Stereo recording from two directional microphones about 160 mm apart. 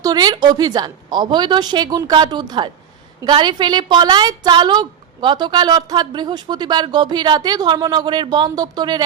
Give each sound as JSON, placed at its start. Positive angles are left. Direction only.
{"t": 0.0, "sound": "a woman's voice", "side_deg": -25}